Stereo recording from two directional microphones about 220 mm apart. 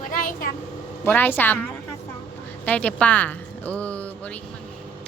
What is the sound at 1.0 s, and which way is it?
Speech, 10° left (ahead or behind).